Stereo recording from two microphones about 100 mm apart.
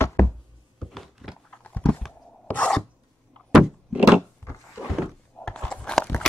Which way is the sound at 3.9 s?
10° right (ahead or behind).